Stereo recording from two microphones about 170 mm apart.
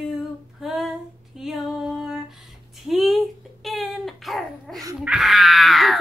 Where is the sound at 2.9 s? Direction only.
Centre (ahead or behind).